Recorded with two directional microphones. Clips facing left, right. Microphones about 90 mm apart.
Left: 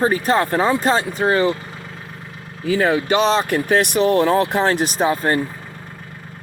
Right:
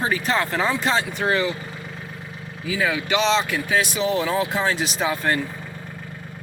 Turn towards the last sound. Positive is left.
turn(degrees=40)  # may be behind; listen again after turning